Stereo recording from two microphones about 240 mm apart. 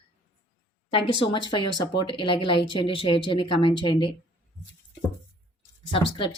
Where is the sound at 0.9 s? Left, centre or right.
Left.